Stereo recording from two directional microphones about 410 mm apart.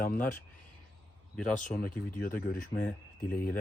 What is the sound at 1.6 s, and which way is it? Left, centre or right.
Speech, centre.